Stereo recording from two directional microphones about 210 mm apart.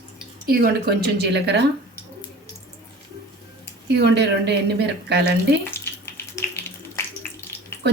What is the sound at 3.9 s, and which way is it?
Speech, 50° right (ahead or behind).